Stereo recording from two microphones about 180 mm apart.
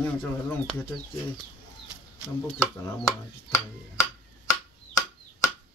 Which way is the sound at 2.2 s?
15° left (ahead or behind).